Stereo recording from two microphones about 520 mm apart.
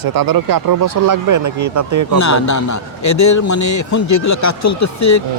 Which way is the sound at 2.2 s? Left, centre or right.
Left.